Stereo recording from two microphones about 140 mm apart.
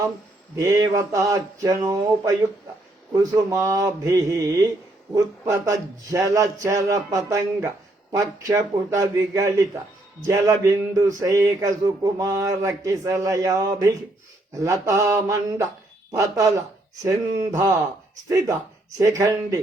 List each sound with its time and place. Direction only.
0.5 s speech: 25° right (ahead or behind)